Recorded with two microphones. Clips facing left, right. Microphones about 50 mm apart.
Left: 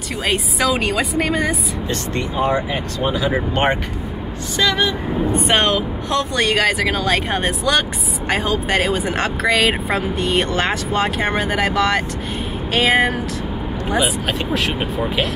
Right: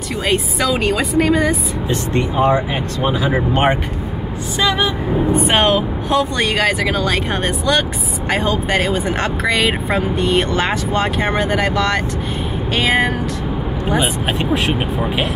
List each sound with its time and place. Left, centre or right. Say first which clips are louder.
0.2 s speech: right 1 dB; centre
1.9 s speech: right 5 dB; right
4.6 s speech: right 1 dB; centre
5.5 s speech: even; centre
14.2 s speech: right 2 dB; right